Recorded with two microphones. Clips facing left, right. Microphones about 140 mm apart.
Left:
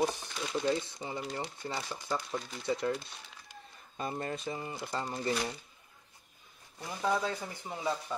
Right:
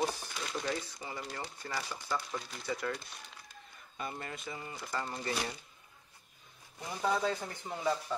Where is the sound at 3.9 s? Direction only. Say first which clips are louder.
Left 5 dB; 35° left (ahead or behind).